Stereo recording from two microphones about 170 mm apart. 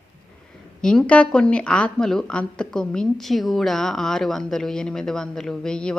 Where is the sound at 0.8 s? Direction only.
5° left (ahead or behind).